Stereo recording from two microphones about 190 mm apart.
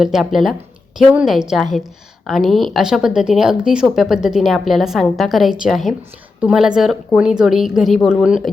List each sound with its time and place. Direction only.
0.0 s a woman's voice: centre (ahead or behind)